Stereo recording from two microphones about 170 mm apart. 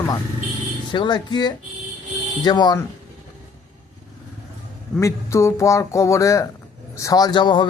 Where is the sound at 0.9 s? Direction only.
25° left (ahead or behind).